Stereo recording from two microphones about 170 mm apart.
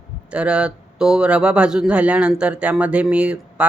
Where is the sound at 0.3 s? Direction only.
5° right (ahead or behind).